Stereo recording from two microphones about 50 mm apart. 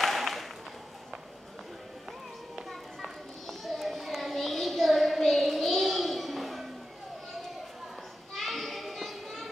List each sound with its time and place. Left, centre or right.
0.0 s applause: centre
2.7 s children playing: centre
8.4 s children playing: centre